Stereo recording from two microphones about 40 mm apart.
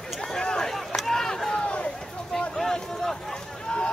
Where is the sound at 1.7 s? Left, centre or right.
Left.